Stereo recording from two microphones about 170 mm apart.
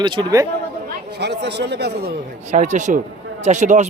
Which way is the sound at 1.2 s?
85° right.